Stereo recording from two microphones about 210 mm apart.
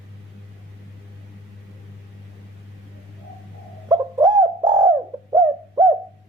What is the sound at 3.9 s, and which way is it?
Bird, 20° right (ahead or behind).